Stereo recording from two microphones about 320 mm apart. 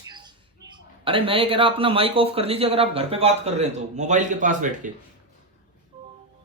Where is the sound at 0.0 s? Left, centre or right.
Centre.